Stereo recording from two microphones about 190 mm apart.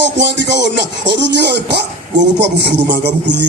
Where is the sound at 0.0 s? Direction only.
70° right (ahead or behind).